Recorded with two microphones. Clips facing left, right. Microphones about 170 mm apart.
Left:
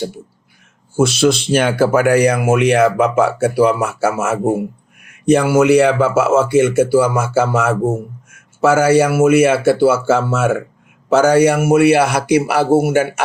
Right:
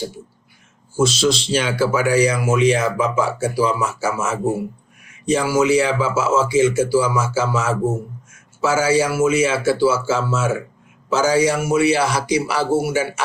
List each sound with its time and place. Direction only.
0.9 s speech: 60° left (ahead or behind)